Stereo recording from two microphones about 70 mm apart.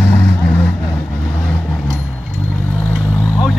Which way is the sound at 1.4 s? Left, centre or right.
Centre.